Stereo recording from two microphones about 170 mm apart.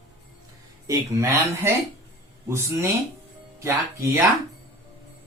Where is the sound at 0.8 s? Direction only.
20° right (ahead or behind).